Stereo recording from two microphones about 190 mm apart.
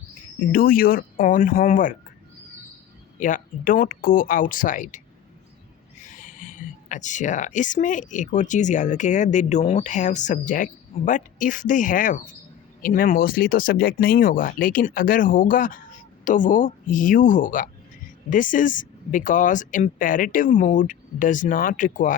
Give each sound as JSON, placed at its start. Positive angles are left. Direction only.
{"t": 0.5, "sound": "speech", "side_deg": 50}
{"t": 3.2, "sound": "speech", "side_deg": 45}
{"t": 6.1, "sound": "speech", "side_deg": 45}